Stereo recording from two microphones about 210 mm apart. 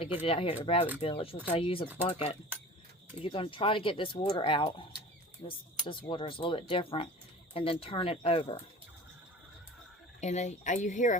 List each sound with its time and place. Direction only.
0.0 s speech: 25° left (ahead or behind)
3.2 s speech: 25° left (ahead or behind)
10.2 s speech: 35° left (ahead or behind)